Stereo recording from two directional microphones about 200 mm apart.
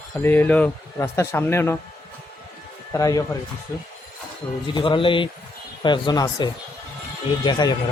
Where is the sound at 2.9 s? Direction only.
15° left (ahead or behind).